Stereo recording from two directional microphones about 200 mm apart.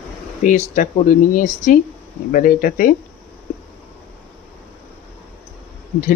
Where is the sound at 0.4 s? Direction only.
40° left (ahead or behind).